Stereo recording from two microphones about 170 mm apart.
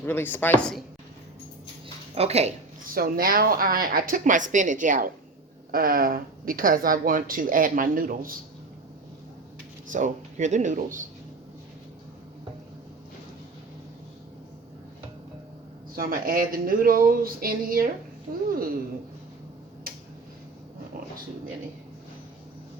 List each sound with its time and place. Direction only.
0.0 s speech: 10° left (ahead or behind)
2.1 s speech: 40° right (ahead or behind)
2.8 s speech: 60° right (ahead or behind)
9.9 s speech: 45° right (ahead or behind)
16.0 s speech: 55° right (ahead or behind)